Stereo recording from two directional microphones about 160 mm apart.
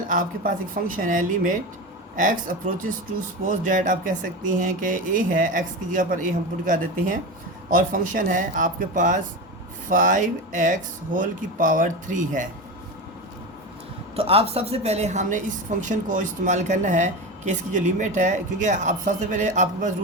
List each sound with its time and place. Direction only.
0.1 s a woman's voice: 60° right (ahead or behind)
14.2 s a woman's voice: 35° right (ahead or behind)